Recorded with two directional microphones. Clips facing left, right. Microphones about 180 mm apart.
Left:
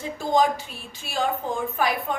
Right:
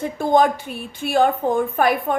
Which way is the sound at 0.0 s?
55° right (ahead or behind).